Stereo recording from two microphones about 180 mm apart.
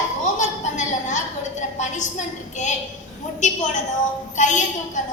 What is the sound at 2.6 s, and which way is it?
Speech, 40° left (ahead or behind).